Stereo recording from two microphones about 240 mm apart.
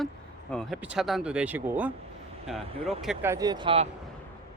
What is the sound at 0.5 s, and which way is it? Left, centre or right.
Speech, centre.